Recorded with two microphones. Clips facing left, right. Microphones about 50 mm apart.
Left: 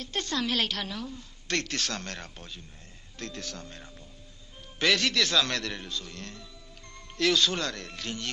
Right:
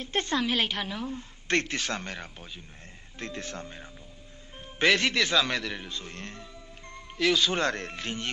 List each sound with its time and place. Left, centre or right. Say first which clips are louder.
0.0 s a woman's voice: right 3 dB; right
1.0 s speech: right 4 dB; right; by 2.6 s centre
3.2 s a woman's voice: right 2 dB; right
4.7 s speech: right 2 dB; right
5.9 s speech: even; right
7.2 s speech: even; centre
7.5 s a woman's voice: right 5 dB; right